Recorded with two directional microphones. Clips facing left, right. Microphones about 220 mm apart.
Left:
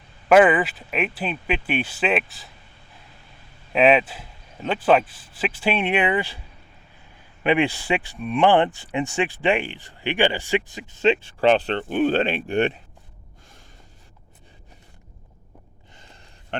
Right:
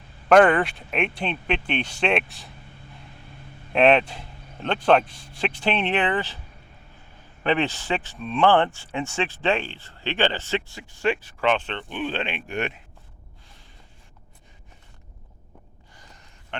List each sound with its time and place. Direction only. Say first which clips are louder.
0.3 s speech: left 1 dB; 5° left (ahead or behind)
3.7 s speech: left 1 dB; 5° left (ahead or behind)
7.4 s speech: left 3 dB; 10° left (ahead or behind); by 12.8 s 30° left (ahead or behind)
16.0 s a sound: left 1 dB; 25° left (ahead or behind)